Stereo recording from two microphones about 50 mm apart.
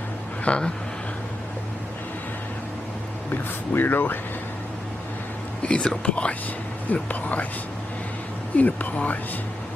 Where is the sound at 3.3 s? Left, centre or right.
Left.